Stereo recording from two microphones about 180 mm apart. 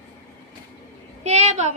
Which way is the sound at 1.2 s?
40° right (ahead or behind).